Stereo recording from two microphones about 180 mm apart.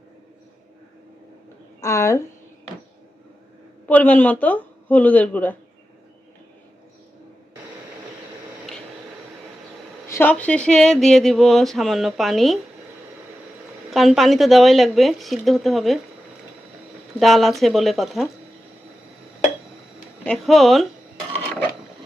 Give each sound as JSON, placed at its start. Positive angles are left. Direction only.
{"t": 1.8, "sound": "speech", "side_deg": 15}
{"t": 3.8, "sound": "speech", "side_deg": 10}
{"t": 10.1, "sound": "speech", "side_deg": 10}
{"t": 13.9, "sound": "speech", "side_deg": 0}
{"t": 17.2, "sound": "speech", "side_deg": 0}
{"t": 20.2, "sound": "dishes", "side_deg": 0}